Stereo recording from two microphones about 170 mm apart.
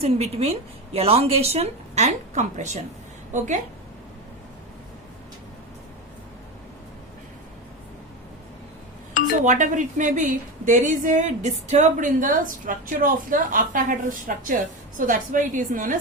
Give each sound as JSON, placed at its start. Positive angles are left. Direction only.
{"t": 0.0, "sound": "a woman's voice", "side_deg": -35}
{"t": 9.4, "sound": "a woman's voice", "side_deg": -50}